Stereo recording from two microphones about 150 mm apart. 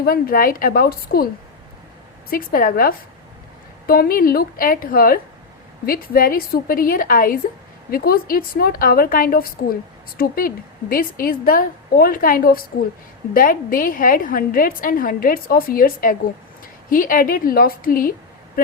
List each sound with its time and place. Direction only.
0.0 s a woman's voice: 75° left (ahead or behind)
2.3 s a woman's voice: 70° left (ahead or behind)